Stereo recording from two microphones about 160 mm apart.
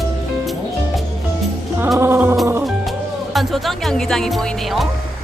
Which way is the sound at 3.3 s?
Centre (ahead or behind).